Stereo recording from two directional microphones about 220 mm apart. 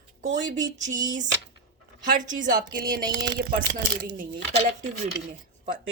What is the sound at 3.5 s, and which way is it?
Speech, 40° right (ahead or behind).